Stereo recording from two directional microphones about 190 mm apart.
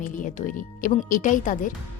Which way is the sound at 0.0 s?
45° left (ahead or behind).